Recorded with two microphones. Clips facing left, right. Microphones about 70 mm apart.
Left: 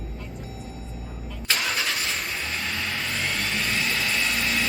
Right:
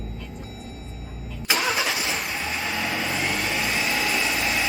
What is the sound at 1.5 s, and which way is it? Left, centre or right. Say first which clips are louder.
Vehicle: right 3 dB; centre.